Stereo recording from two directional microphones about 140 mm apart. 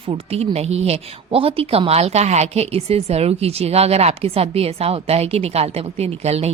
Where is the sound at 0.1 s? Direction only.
45° right (ahead or behind).